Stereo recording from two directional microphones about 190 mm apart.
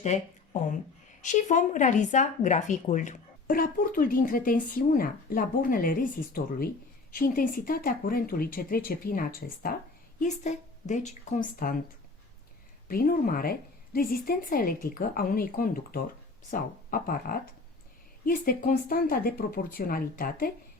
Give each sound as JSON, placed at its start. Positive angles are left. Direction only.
{"t": 0.0, "sound": "speech", "side_deg": 40}
{"t": 10.2, "sound": "speech", "side_deg": 40}
{"t": 12.9, "sound": "speech", "side_deg": 50}